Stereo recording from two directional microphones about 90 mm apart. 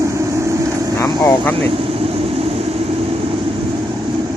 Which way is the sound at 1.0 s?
30° left (ahead or behind).